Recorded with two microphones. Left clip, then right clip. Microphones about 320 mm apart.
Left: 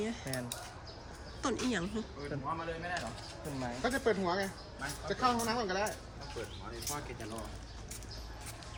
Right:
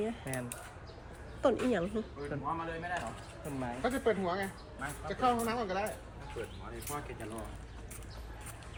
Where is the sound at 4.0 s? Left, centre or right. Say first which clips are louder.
Even; left.